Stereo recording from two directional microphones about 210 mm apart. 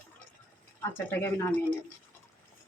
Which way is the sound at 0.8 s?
10° left (ahead or behind).